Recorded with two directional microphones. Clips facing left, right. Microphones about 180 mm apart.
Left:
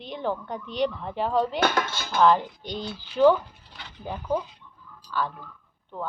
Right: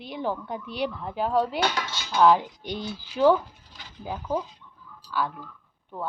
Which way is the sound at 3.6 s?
65° left (ahead or behind).